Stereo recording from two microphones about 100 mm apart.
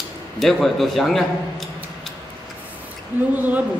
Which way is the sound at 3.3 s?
15° right (ahead or behind).